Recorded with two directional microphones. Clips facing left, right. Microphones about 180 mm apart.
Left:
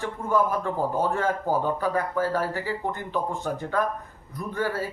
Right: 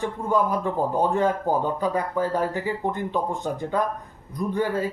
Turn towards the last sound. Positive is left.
turn(degrees=-15)  # may be behind; listen again after turning